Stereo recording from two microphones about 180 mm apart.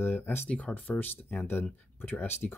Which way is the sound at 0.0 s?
10° left (ahead or behind).